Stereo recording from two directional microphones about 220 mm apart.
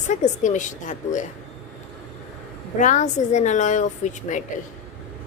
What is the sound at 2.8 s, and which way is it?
A woman's voice, 35° left (ahead or behind).